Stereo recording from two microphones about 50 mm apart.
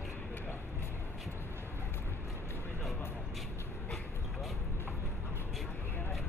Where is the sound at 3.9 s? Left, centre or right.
Centre.